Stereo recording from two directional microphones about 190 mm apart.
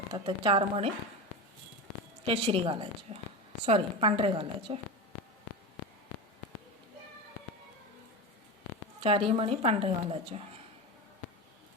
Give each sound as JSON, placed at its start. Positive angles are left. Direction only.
{"t": 0.1, "sound": "a woman's voice", "side_deg": -25}
{"t": 2.2, "sound": "a woman's voice", "side_deg": -30}
{"t": 9.0, "sound": "a woman's voice", "side_deg": -30}